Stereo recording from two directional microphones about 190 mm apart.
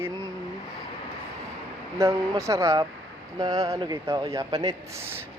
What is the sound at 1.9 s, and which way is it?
Speech, 15° right (ahead or behind).